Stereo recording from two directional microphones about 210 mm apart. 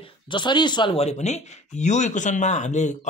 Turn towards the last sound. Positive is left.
turn(degrees=35)  # may be behind; listen again after turning